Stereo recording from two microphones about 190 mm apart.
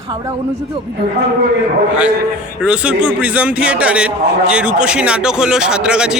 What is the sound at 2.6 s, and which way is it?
A man's voice, 5° right (ahead or behind).